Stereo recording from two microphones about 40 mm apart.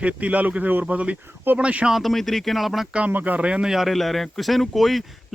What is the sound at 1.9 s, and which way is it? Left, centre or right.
Speech, centre.